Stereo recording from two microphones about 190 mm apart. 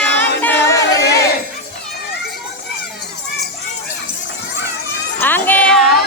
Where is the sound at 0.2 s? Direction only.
10° left (ahead or behind).